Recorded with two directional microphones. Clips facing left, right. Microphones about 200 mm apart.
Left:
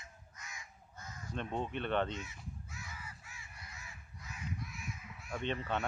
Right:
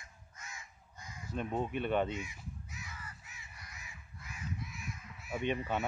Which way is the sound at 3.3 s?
20° right (ahead or behind).